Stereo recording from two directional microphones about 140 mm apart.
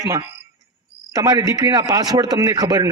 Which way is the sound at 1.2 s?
25° right (ahead or behind).